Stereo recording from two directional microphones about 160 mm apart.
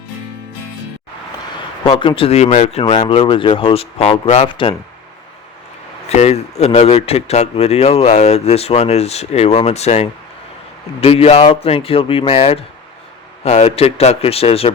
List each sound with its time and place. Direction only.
1.8 s speech: 30° left (ahead or behind)
6.1 s speech: 40° left (ahead or behind)